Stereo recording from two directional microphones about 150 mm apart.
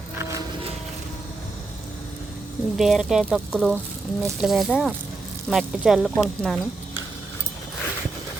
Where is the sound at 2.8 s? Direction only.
Centre (ahead or behind).